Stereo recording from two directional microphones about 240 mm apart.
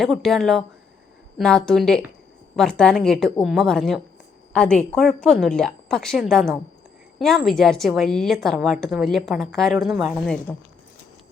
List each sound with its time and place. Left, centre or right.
0.0 s a woman's voice: centre